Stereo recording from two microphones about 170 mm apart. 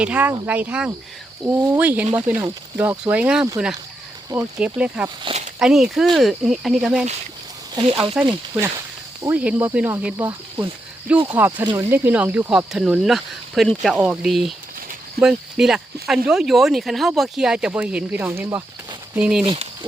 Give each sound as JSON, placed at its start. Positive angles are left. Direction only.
{"t": 0.0, "sound": "speech", "side_deg": -10}
{"t": 4.6, "sound": "speech", "side_deg": -5}
{"t": 5.0, "sound": "speech", "side_deg": -30}
{"t": 5.5, "sound": "speech", "side_deg": -5}
{"t": 7.8, "sound": "speech", "side_deg": -30}
{"t": 8.2, "sound": "speech", "side_deg": -20}
{"t": 9.2, "sound": "speech", "side_deg": -10}
{"t": 11.3, "sound": "speech", "side_deg": -10}
{"t": 19.5, "sound": "speech", "side_deg": -30}